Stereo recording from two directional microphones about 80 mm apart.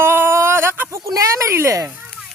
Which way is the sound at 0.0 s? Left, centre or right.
Right.